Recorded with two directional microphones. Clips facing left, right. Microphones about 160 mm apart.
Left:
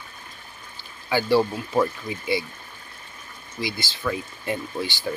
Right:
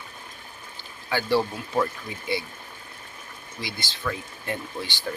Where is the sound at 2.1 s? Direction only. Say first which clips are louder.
Left 6 dB; 10° left (ahead or behind).